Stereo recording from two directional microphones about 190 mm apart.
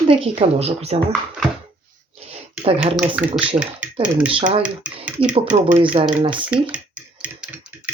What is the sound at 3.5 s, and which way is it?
Speech, 20° right (ahead or behind).